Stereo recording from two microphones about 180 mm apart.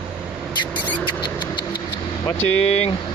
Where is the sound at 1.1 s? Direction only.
25° left (ahead or behind).